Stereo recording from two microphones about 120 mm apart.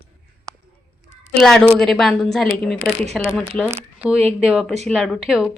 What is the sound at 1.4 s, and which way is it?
Speech, centre (ahead or behind).